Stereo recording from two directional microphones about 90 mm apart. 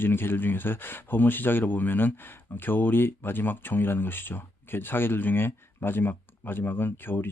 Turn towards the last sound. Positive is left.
turn(degrees=25)  # may be behind; listen again after turning